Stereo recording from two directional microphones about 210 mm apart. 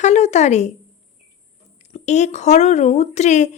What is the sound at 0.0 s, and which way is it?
Speech, 35° left (ahead or behind).